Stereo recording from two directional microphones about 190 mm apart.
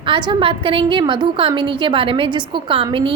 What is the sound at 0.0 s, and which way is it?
A woman's voice, 25° right (ahead or behind).